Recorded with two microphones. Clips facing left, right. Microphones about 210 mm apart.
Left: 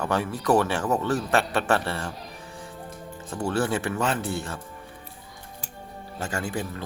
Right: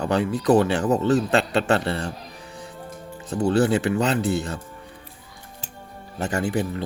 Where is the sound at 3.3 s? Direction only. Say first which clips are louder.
Right 6 dB; 20° right (ahead or behind).